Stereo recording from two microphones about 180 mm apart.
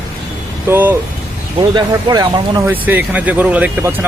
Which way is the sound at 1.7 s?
20° right (ahead or behind).